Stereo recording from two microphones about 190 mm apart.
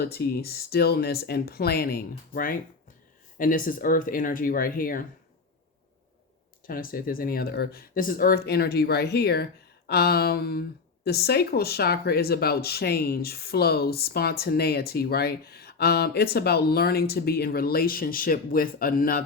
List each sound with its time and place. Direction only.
0.0 s speech: 55° left (ahead or behind)
6.7 s speech: 50° left (ahead or behind)